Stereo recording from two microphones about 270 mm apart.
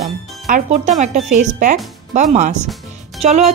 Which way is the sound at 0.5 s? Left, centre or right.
Right.